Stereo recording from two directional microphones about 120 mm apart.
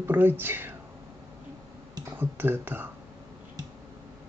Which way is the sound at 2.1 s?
15° right (ahead or behind).